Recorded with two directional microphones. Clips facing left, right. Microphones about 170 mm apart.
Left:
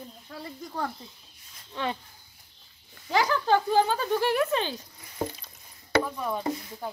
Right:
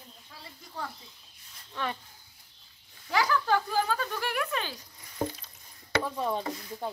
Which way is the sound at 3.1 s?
25° left (ahead or behind).